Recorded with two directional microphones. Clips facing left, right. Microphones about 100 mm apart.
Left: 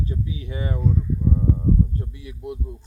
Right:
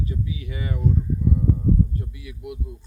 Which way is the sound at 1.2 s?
25° left (ahead or behind).